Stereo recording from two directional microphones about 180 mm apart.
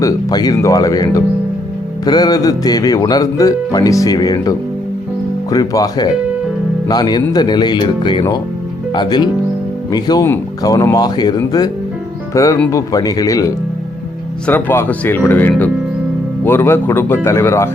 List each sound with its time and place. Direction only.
0.0 s speech: 20° left (ahead or behind)